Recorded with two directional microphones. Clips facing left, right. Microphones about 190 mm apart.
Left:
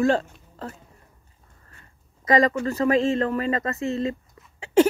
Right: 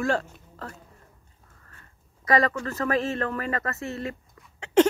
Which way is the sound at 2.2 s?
20° left (ahead or behind).